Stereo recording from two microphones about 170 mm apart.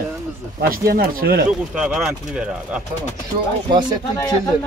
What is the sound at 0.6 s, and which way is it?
Speech, 60° right (ahead or behind).